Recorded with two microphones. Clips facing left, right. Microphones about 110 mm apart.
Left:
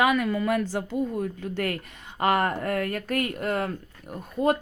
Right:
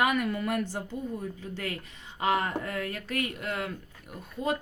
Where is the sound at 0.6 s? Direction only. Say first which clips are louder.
Left 7 dB; 90° left.